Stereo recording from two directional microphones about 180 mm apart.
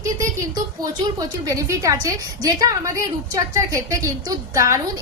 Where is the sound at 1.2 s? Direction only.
15° right (ahead or behind).